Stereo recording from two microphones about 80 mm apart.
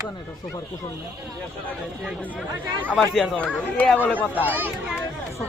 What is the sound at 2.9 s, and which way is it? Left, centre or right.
Speech, centre.